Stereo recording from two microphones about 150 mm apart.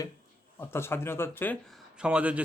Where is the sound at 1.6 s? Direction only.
Centre (ahead or behind).